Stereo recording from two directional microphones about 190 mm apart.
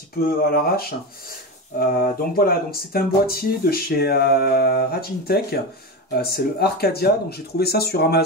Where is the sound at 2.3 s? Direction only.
50° left (ahead or behind).